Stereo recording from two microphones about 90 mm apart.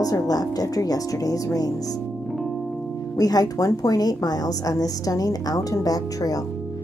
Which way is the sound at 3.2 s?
45° left (ahead or behind).